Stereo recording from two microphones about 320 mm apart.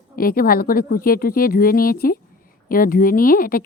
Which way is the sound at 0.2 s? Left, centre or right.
Left.